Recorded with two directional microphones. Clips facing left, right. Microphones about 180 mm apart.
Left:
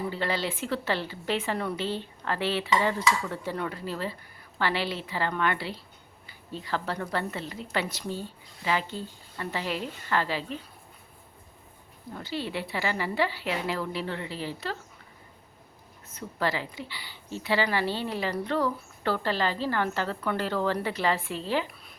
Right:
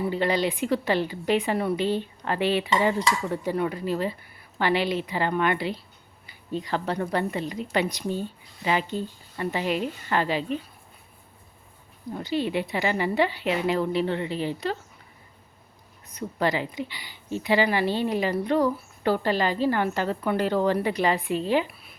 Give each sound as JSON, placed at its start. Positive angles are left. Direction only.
{"t": 0.0, "sound": "a woman's voice", "side_deg": -15}
{"t": 12.1, "sound": "speech", "side_deg": -15}
{"t": 16.0, "sound": "a woman's voice", "side_deg": -15}